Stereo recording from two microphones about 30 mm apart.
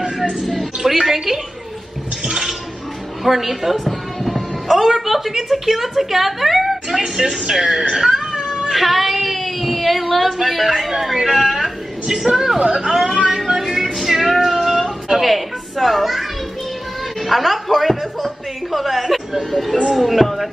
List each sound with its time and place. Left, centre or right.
0.8 s speech: centre
3.3 s a man's voice: centre
7.0 s speech: right
7.9 s cat: centre
8.6 s child singing: centre
10.3 s a woman's voice: centre
12.9 s a woman's voice: centre
13.5 s music: centre
14.3 s a sound: centre
15.2 s a child's voice: centre